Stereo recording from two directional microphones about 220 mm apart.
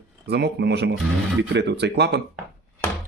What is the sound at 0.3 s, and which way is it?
Speech, 50° right (ahead or behind).